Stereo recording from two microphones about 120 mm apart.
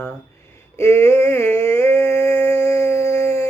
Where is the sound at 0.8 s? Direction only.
20° left (ahead or behind).